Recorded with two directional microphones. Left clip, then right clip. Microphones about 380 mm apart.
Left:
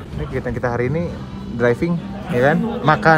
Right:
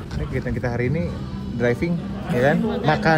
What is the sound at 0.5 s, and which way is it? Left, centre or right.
Speech, left.